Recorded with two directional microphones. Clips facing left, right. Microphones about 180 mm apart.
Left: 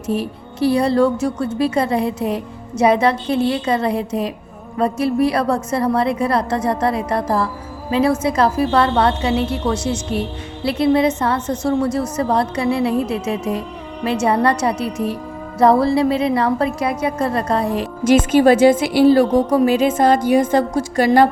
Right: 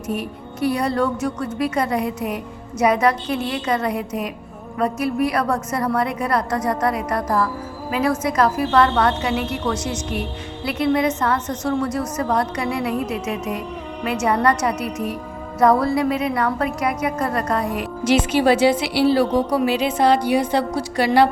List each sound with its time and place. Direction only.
0.1 s a woman's voice: 30° left (ahead or behind)
18.3 s a woman's voice: 45° left (ahead or behind)